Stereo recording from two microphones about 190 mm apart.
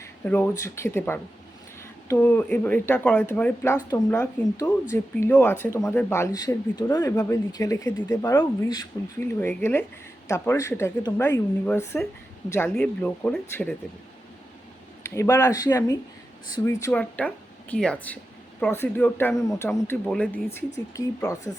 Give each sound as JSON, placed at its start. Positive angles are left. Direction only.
{"t": 0.0, "sound": "speech", "side_deg": 10}
{"t": 15.0, "sound": "speech", "side_deg": 15}